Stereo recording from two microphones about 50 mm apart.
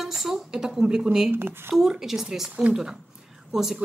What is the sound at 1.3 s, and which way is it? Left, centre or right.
Speech, right.